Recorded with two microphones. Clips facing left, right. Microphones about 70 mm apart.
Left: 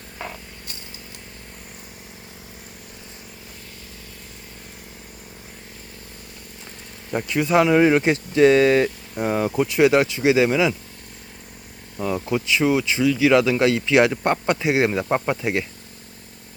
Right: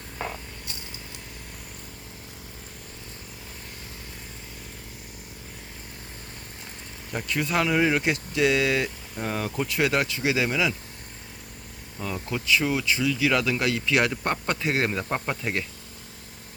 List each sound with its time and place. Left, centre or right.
7.1 s speech: left
11.9 s speech: left